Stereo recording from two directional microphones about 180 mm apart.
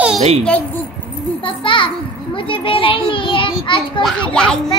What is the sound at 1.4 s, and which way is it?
A child's voice, 30° left (ahead or behind).